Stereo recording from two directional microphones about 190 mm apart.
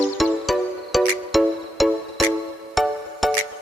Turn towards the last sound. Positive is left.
turn(degrees=0)  # may be behind; listen again after turning